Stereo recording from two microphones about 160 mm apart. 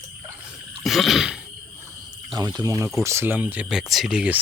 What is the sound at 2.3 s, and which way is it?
Speech, 25° right (ahead or behind).